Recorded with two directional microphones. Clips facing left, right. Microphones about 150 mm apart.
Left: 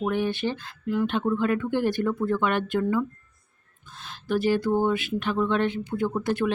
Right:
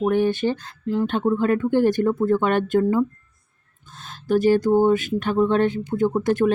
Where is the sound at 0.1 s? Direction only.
45° right (ahead or behind).